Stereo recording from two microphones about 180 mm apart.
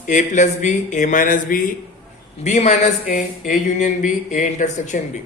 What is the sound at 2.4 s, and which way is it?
A man's voice, 40° left (ahead or behind).